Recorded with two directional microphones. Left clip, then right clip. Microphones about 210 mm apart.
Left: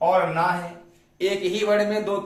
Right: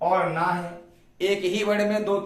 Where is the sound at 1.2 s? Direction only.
20° right (ahead or behind).